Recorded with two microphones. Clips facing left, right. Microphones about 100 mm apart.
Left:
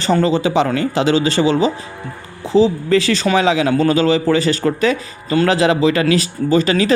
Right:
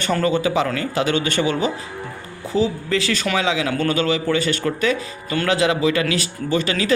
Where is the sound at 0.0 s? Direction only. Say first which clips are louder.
Left 4 dB; 25° left (ahead or behind).